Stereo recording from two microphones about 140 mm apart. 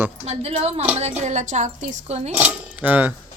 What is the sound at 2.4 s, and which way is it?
Speech, 10° right (ahead or behind).